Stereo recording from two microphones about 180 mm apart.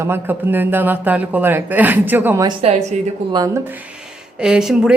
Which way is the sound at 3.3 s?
20° right (ahead or behind).